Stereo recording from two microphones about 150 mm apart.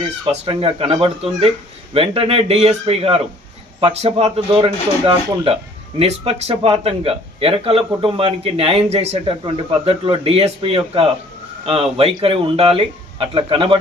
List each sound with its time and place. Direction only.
0.3 s speech: 40° right (ahead or behind)